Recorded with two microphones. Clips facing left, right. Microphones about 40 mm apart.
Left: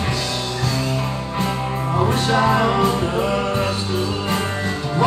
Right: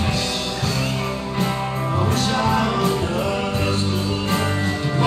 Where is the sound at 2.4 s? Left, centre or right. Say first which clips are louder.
Left 5 dB; centre.